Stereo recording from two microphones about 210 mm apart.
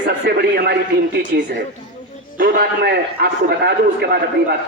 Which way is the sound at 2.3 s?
45° right (ahead or behind).